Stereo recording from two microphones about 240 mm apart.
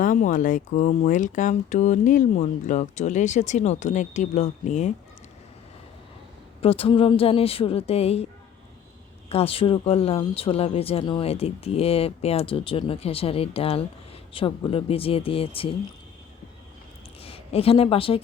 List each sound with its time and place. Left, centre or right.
0.0 s speech: left
6.6 s speech: left
9.3 s speech: left
17.2 s speech: left